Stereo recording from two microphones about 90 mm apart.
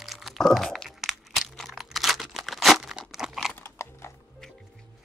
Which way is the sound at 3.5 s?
30° left (ahead or behind).